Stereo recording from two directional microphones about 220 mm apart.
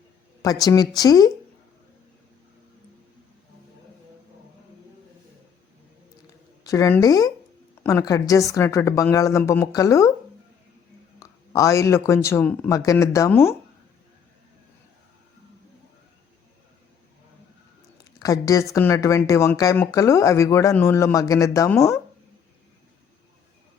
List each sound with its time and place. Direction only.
0.4 s speech: 15° left (ahead or behind)
6.7 s speech: 15° left (ahead or behind)
11.2 s speech: 15° left (ahead or behind)
18.2 s a woman's voice: 15° left (ahead or behind)